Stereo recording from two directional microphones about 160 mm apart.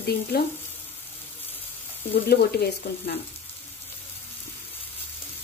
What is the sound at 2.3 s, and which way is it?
Sizzle, 80° left.